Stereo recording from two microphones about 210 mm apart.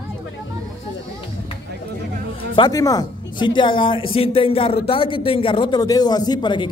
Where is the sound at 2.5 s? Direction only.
20° left (ahead or behind).